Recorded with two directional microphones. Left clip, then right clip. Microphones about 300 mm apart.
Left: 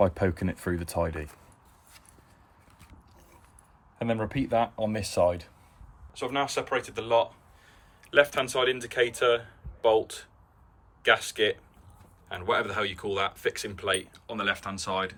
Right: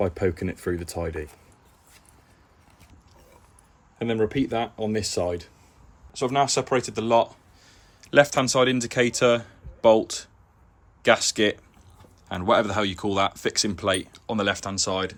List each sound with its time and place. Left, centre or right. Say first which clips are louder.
0.0 s speech: even; centre
3.9 s speech: right 5 dB; centre
6.1 s speech: right 6 dB; centre
11.0 s speech: right 4 dB; centre